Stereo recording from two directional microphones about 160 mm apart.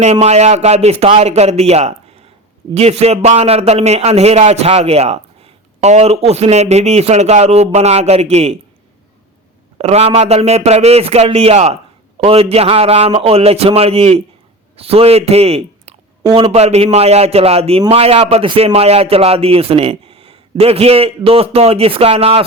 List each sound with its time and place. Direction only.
0.0 s a man's voice: 45° right (ahead or behind)
9.7 s a man's voice: 40° right (ahead or behind)